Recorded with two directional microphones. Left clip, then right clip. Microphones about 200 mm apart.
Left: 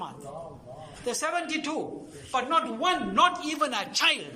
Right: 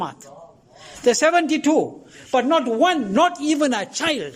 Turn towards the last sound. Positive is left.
turn(degrees=-40)  # may be behind; listen again after turning